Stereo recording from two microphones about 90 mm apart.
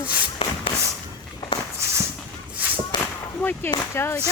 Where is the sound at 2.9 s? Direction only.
55° left (ahead or behind).